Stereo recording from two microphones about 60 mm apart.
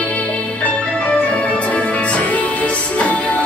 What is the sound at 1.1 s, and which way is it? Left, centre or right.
Music, left.